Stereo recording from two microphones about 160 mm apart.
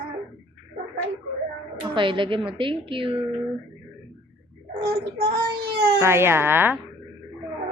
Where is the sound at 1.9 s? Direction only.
30° right (ahead or behind).